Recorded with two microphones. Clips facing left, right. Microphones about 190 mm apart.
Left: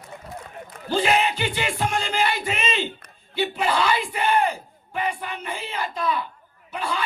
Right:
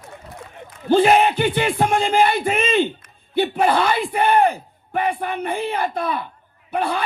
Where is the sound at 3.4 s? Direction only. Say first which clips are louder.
Right 5 dB; 55° right (ahead or behind).